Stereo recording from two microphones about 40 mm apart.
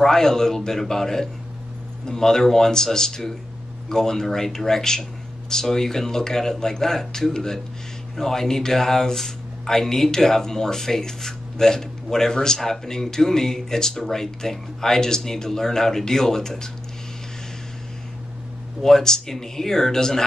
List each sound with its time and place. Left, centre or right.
0.0 s speech: centre
18.8 s speech: centre